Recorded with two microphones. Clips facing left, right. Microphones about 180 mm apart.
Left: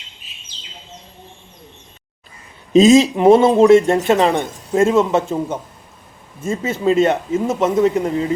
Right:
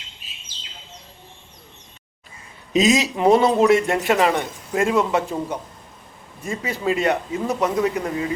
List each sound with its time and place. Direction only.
2.7 s speech: 25° left (ahead or behind)